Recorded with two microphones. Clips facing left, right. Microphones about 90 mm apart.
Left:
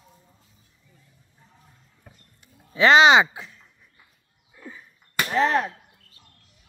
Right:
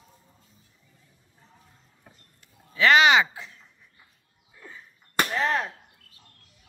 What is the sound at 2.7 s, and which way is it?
Speech, 20° left (ahead or behind).